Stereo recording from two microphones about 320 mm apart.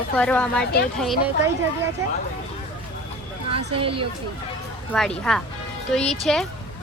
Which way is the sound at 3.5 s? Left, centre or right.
Centre.